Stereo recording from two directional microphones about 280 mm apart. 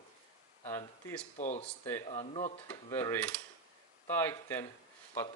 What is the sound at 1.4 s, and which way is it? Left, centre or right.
Speech, left.